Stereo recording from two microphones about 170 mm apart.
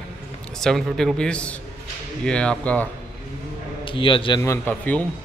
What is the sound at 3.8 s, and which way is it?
Speech, 30° left (ahead or behind).